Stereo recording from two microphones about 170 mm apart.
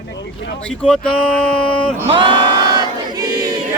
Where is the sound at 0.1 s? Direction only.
90° left.